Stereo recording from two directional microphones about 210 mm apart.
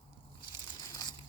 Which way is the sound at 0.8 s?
20° left (ahead or behind).